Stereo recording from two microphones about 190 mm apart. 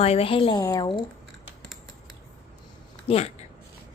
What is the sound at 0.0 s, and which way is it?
Speech, 30° left (ahead or behind).